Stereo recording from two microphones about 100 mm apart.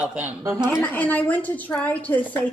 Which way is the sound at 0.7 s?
20° left (ahead or behind).